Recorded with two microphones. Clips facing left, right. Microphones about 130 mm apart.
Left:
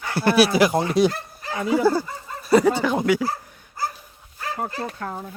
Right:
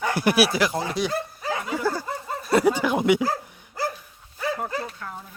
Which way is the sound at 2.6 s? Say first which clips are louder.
Even; 10° right (ahead or behind).